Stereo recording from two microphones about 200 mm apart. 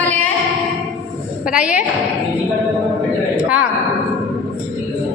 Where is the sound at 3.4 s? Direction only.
5° right (ahead or behind).